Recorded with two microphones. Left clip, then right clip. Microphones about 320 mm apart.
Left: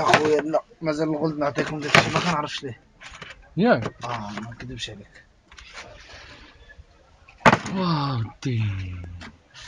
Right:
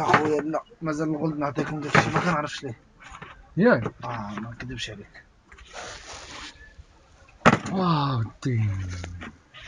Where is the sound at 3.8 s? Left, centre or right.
Left.